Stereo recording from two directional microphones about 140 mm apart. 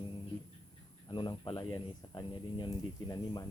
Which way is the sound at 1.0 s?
35° left (ahead or behind).